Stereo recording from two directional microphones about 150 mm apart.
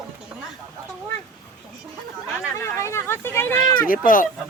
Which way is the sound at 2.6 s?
20° left (ahead or behind).